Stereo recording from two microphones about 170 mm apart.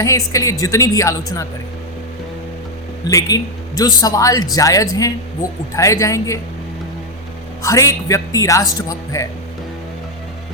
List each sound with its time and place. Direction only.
0.0 s speech: 20° left (ahead or behind)
3.1 s speech: 20° left (ahead or behind)
7.6 s speech: 20° left (ahead or behind)